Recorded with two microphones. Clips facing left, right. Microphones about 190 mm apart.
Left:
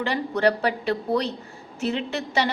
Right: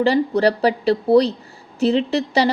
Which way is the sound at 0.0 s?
35° right (ahead or behind).